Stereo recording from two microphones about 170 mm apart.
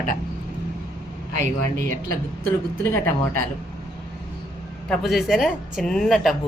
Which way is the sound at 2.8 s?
15° left (ahead or behind).